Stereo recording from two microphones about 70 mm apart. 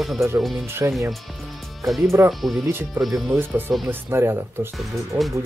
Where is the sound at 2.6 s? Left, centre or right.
Right.